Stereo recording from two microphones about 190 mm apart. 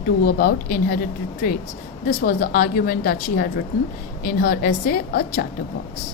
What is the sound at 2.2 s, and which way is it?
A woman's voice, 50° left (ahead or behind).